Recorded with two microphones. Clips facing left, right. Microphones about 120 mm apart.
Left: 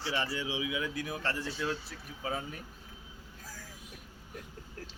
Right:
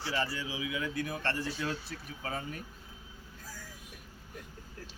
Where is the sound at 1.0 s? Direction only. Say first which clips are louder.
Right 1 dB; 5° left (ahead or behind).